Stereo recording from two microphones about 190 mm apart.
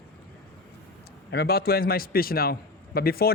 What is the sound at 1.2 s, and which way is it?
A man's voice, 55° left (ahead or behind).